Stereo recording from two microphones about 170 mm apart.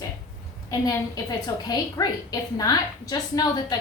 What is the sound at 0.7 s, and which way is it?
A woman's voice, 20° left (ahead or behind).